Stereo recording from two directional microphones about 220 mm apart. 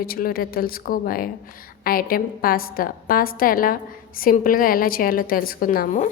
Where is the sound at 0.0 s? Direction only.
40° left (ahead or behind).